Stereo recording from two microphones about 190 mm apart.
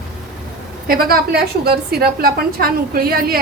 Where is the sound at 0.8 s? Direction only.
50° right (ahead or behind).